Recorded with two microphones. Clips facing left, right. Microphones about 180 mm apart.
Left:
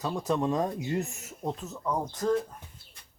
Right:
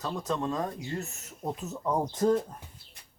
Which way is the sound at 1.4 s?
5° right (ahead or behind).